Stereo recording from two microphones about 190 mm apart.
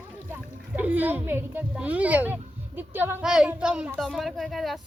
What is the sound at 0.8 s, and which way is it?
A child's voice, 10° right (ahead or behind).